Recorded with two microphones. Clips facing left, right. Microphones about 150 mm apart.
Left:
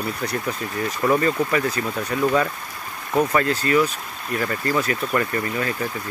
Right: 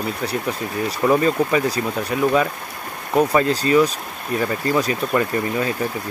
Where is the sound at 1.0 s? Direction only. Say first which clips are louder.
Right 3 dB; 15° right (ahead or behind).